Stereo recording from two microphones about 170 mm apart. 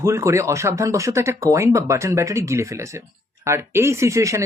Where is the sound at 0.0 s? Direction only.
15° right (ahead or behind).